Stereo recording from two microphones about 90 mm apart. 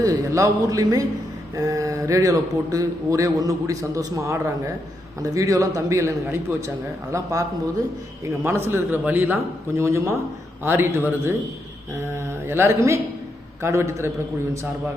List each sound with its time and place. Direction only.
0.0 s a man's voice: 35° right (ahead or behind)
8.4 s a man's voice: 30° right (ahead or behind)